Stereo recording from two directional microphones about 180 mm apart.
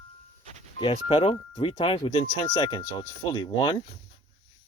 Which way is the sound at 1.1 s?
30° left (ahead or behind).